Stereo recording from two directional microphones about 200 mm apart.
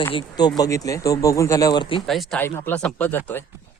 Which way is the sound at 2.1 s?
Centre (ahead or behind).